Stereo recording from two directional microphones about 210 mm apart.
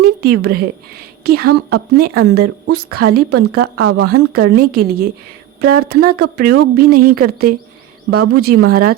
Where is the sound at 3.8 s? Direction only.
85° right.